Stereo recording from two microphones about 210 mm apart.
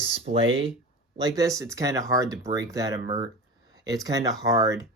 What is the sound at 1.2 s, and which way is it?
Speech, 15° right (ahead or behind).